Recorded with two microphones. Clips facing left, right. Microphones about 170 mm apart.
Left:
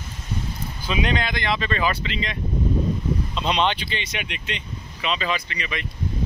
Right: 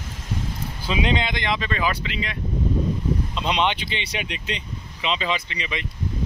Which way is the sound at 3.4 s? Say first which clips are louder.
Left 1 dB; 15° right (ahead or behind).